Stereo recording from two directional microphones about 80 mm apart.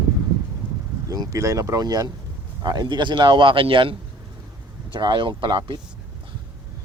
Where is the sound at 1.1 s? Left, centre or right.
Right.